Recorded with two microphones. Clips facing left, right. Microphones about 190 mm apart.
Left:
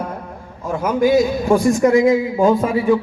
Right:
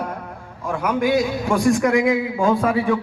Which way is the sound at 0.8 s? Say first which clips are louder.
Left 5 dB; 40° left (ahead or behind).